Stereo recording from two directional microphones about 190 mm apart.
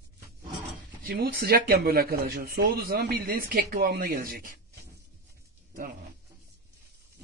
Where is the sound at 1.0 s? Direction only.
50° right (ahead or behind).